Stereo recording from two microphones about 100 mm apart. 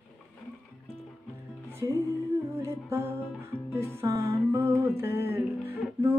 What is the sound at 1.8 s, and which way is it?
Music, 40° right (ahead or behind).